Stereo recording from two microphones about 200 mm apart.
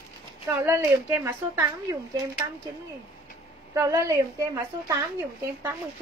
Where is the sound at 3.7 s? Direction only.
15° right (ahead or behind).